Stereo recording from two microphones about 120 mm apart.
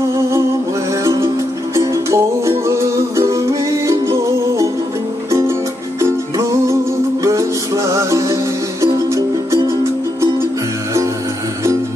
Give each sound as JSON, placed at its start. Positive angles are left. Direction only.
{"t": 0.1, "sound": "music", "side_deg": -25}